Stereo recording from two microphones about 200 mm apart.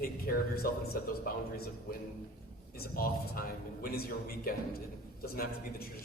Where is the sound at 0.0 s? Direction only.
50° left (ahead or behind).